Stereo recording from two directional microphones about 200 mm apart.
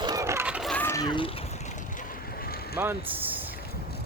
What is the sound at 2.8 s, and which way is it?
Speech, 10° right (ahead or behind).